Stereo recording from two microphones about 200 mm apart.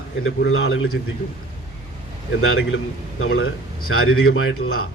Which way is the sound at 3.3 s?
90° left.